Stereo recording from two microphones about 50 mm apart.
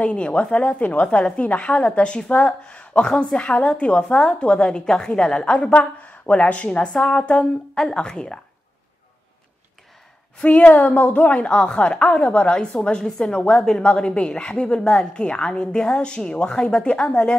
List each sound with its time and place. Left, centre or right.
0.0 s a woman's voice: left
10.4 s a woman's voice: left